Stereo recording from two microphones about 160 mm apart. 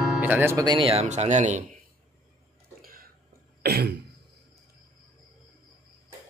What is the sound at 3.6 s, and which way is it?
Throat clearing, 85° right.